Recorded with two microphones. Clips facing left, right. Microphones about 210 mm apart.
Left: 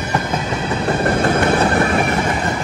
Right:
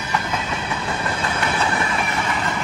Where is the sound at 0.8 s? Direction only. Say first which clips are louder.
Left 13 dB; 55° left (ahead or behind).